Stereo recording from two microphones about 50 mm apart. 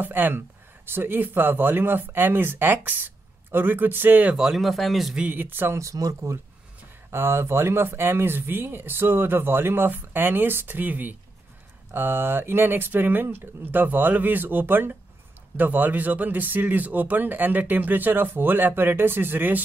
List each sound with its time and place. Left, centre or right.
0.0 s speech: right
4.4 s speech: centre
5.3 s speech: right
5.7 s speech: right
7.1 s speech: right
11.9 s speech: right